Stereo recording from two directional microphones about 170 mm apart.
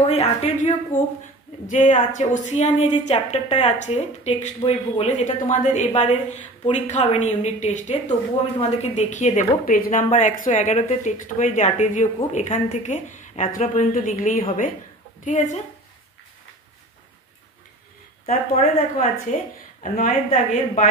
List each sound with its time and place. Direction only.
0.1 s a woman's voice: 40° left (ahead or behind)
18.2 s speech: 40° left (ahead or behind)
19.3 s speech: 55° left (ahead or behind)